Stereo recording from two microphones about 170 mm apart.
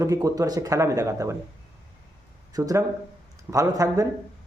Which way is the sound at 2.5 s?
20° right (ahead or behind).